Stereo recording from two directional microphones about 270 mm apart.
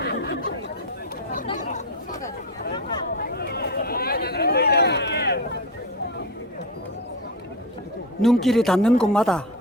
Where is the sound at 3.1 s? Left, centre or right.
Left.